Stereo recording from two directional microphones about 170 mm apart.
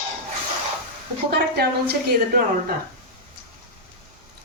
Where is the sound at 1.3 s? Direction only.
70° right (ahead or behind).